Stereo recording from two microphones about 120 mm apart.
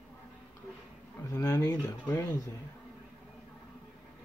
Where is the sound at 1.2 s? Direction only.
30° left (ahead or behind).